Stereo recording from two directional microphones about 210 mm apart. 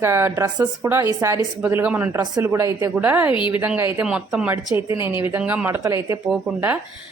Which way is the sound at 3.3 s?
25° left (ahead or behind).